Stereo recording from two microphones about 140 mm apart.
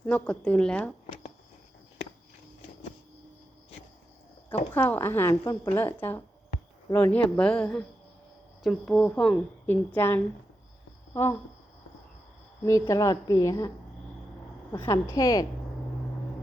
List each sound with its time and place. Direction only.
0.0 s a woman's voice: 5° left (ahead or behind)
4.7 s a woman's voice: 15° left (ahead or behind)
12.8 s a woman's voice: 25° left (ahead or behind)
14.7 s a woman's voice: 20° left (ahead or behind)